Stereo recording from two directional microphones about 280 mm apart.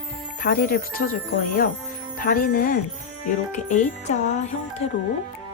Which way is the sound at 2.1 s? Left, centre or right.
Left.